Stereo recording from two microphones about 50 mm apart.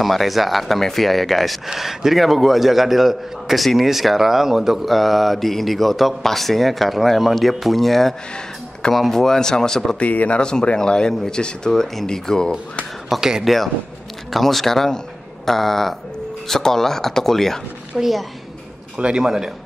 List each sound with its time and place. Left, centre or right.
0.0 s a man's voice: centre
9.9 s speech: left
10.4 s speech: centre
13.1 s a man's voice: centre
18.9 s a man's voice: centre